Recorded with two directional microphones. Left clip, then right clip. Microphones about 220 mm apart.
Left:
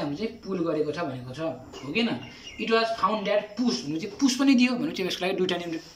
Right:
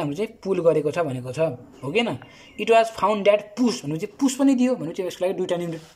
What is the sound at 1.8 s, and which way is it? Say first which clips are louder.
Speech: right 5 dB; 40° right (ahead or behind).